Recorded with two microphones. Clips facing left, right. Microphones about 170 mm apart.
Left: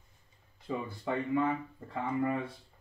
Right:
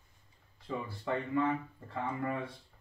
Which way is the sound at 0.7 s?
10° left (ahead or behind).